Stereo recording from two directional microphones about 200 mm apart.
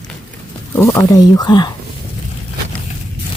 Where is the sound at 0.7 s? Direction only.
10° left (ahead or behind).